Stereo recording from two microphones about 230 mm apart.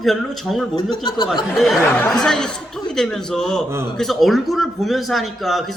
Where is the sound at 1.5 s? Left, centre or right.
Centre.